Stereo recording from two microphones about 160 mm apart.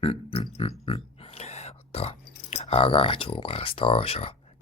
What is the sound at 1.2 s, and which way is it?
Whispering, 40° left (ahead or behind).